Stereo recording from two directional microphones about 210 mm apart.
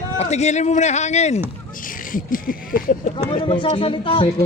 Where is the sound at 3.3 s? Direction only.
25° left (ahead or behind).